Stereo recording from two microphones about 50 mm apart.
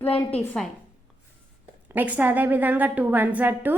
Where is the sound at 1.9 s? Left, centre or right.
Right.